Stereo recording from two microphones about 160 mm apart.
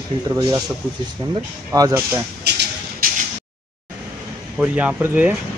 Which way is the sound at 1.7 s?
20° right (ahead or behind).